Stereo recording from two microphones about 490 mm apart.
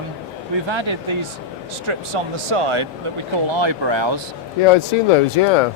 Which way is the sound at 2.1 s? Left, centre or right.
Right.